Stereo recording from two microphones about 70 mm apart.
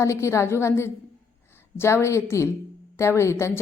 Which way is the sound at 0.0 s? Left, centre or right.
Left.